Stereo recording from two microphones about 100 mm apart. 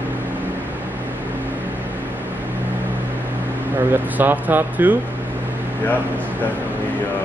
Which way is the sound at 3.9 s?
20° right (ahead or behind).